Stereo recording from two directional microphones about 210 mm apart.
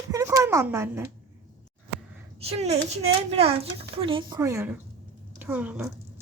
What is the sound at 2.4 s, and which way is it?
A child's voice, 30° right (ahead or behind).